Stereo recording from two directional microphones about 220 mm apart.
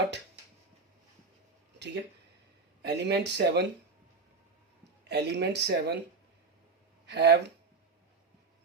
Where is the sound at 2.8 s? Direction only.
50° right (ahead or behind).